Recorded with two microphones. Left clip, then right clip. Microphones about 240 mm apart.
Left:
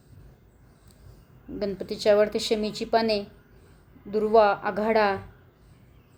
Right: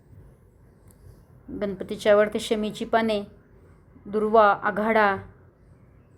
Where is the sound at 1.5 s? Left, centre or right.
Centre.